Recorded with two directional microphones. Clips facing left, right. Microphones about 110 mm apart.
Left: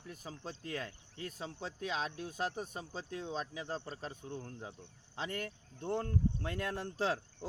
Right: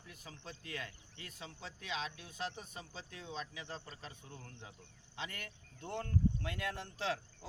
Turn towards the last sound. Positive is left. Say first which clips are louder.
# left 4 dB
turn(degrees=40)  # may be behind; listen again after turning